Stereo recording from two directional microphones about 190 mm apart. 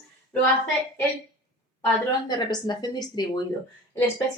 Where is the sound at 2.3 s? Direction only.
20° left (ahead or behind).